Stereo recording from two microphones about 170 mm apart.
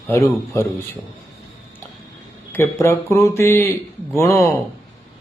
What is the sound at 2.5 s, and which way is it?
Speech, 15° left (ahead or behind).